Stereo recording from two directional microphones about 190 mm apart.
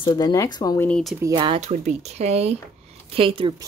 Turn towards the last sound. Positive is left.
turn(degrees=-25)  # may be behind; listen again after turning